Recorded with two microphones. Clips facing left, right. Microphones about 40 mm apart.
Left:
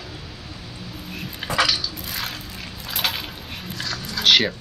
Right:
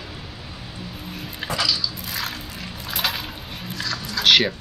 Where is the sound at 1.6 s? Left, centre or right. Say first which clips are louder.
Left 4 dB; left.